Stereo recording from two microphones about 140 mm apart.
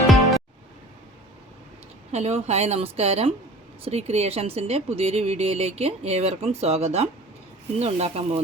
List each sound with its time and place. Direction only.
2.1 s speech: 50° right (ahead or behind)